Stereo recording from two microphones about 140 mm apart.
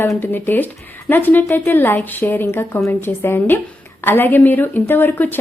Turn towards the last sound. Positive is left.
turn(degrees=15)  # may be behind; listen again after turning